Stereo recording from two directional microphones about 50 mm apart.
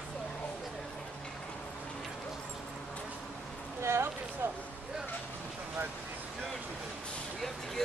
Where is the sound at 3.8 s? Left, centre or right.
Right.